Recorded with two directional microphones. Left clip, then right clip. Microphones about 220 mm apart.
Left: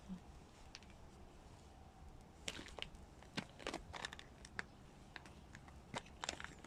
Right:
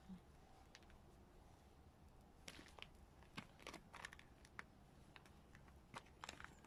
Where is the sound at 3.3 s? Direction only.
20° left (ahead or behind).